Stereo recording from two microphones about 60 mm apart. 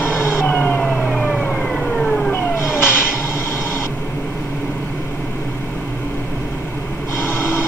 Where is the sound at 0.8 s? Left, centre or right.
Centre.